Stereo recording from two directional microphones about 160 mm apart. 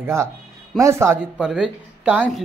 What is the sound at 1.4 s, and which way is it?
Speech, 5° right (ahead or behind).